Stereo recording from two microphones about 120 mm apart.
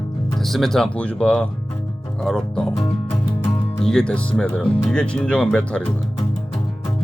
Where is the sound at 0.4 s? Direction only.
Centre (ahead or behind).